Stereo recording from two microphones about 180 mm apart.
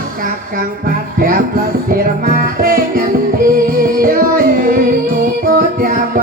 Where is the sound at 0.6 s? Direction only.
50° right (ahead or behind).